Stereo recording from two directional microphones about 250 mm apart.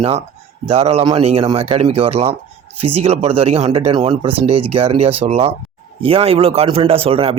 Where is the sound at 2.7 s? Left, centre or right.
Right.